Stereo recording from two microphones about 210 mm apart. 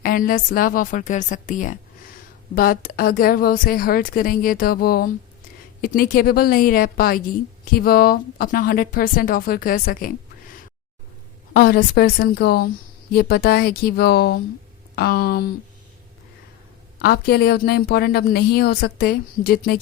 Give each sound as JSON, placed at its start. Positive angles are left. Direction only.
{"t": 0.0, "sound": "a woman's voice", "side_deg": 45}
{"t": 11.5, "sound": "a woman's voice", "side_deg": 45}
{"t": 17.0, "sound": "a woman's voice", "side_deg": 50}